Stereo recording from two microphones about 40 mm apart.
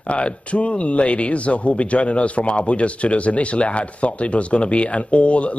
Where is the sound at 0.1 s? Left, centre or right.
Left.